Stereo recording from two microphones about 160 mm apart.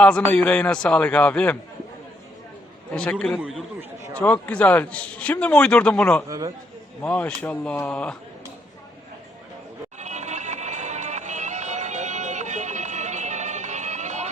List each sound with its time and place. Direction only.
0.0 s a man's voice: 10° left (ahead or behind)
2.9 s a man's voice: 5° left (ahead or behind)
3.8 s speech: 20° right (ahead or behind)
4.2 s a man's voice: 10° left (ahead or behind)
6.2 s speech: 20° right (ahead or behind)
7.0 s a man's voice: 10° left (ahead or behind)
10.0 s music: 45° right (ahead or behind)